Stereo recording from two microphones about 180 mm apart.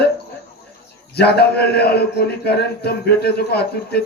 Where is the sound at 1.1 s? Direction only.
65° left (ahead or behind).